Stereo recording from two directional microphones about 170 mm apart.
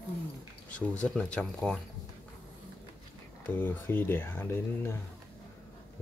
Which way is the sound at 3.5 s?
10° left (ahead or behind).